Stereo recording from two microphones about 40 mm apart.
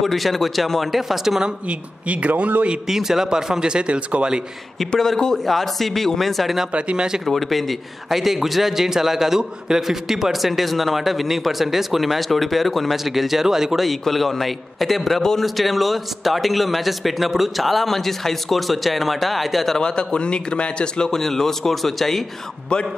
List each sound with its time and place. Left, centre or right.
0.0 s a man's voice: centre
1.7 s speech: right
2.9 s a man's voice: centre
4.9 s a man's voice: centre
6.7 s speech: right
7.2 s a man's voice: centre
13.7 s a man's voice: centre
19.8 s a man's voice: left; by 22.2 s centre